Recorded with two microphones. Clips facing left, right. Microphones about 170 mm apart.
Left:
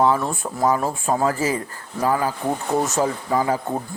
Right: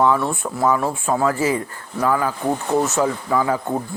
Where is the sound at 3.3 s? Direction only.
35° left (ahead or behind).